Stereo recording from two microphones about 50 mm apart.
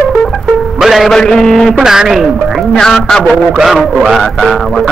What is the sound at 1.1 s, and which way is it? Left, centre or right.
Speech, centre.